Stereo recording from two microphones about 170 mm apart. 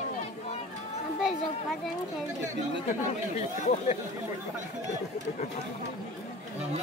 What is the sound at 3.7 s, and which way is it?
Speech, 40° left (ahead or behind).